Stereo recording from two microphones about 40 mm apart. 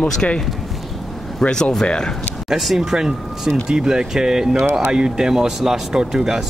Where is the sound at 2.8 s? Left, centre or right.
Centre.